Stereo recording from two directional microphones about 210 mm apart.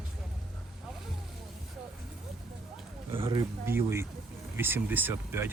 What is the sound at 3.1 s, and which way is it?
Speech, 25° right (ahead or behind).